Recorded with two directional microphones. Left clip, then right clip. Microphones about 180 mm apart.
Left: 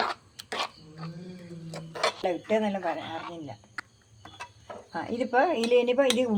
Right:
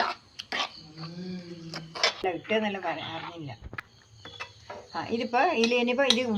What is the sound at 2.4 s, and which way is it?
Speech, 60° left (ahead or behind).